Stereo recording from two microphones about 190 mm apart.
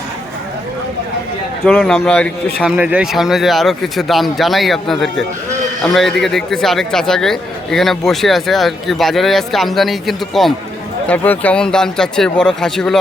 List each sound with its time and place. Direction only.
1.6 s a man's voice: 5° left (ahead or behind)
2.6 s a man's voice: 5° right (ahead or behind)